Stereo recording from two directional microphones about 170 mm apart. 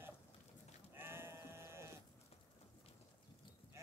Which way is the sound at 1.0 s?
15° right (ahead or behind).